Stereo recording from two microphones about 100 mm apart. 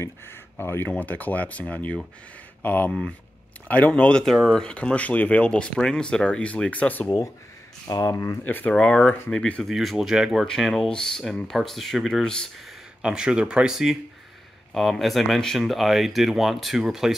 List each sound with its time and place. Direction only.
0.0 s speech: 25° left (ahead or behind)
2.9 s speech: 5° left (ahead or behind)
7.8 s speech: 40° left (ahead or behind)
8.2 s speech: 25° left (ahead or behind); by 10.4 s 5° right (ahead or behind)
10.4 s speech: 5° left (ahead or behind)
13.0 s speech: 10° right (ahead or behind)